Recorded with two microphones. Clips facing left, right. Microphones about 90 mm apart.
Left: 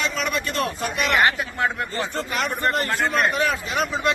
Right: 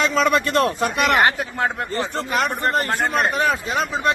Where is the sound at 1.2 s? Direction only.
35° right (ahead or behind).